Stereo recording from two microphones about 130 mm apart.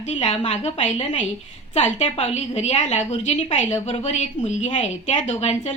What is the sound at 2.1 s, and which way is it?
A woman's voice, 50° left (ahead or behind).